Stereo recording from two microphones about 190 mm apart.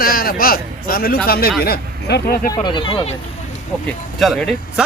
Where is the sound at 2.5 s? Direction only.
25° left (ahead or behind).